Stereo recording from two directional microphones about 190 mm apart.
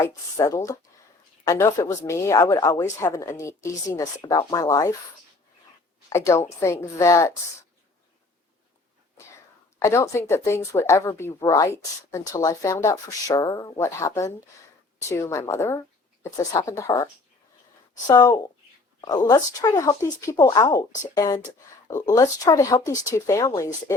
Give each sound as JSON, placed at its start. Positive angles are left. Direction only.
{"t": 0.0, "sound": "speech", "side_deg": 15}
{"t": 6.1, "sound": "speech", "side_deg": 15}
{"t": 9.7, "sound": "speech", "side_deg": 15}